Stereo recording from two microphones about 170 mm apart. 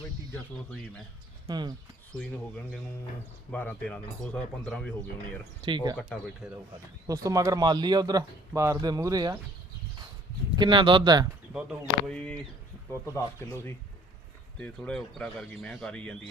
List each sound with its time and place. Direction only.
1.5 s speech: 25° right (ahead or behind)
2.1 s speech: 5° left (ahead or behind)
3.5 s speech: 5° left (ahead or behind)
5.6 s speech: 25° right (ahead or behind)
6.0 s speech: 5° left (ahead or behind)
6.7 s speech: 20° right (ahead or behind)
10.5 s speech: 30° right (ahead or behind)
11.5 s speech: centre (ahead or behind); by 13.7 s 15° left (ahead or behind)
14.6 s speech: 5° left (ahead or behind)